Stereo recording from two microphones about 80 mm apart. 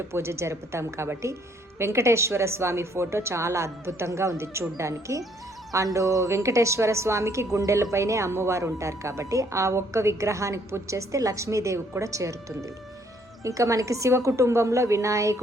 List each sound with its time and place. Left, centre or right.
0.1 s a woman's voice: right